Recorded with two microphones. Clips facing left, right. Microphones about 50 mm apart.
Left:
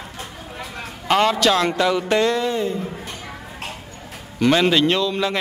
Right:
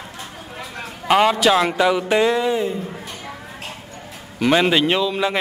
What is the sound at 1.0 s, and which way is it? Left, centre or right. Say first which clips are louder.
A man's voice: right 2 dB; centre.